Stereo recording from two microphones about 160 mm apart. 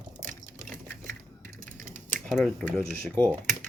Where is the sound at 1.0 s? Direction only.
60° right (ahead or behind).